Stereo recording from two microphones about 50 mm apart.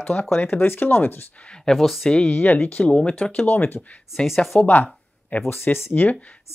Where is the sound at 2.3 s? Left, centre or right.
Left.